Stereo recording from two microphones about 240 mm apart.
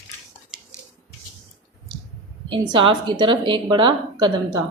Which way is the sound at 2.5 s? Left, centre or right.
Right.